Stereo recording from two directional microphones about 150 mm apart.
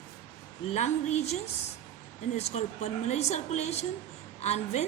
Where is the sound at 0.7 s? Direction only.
50° left (ahead or behind).